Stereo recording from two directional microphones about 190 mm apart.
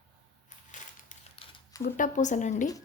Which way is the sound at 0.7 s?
40° left (ahead or behind).